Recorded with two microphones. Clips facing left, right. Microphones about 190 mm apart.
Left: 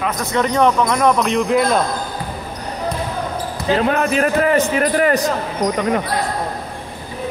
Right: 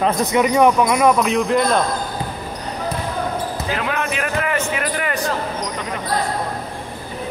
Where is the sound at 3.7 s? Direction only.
35° left (ahead or behind).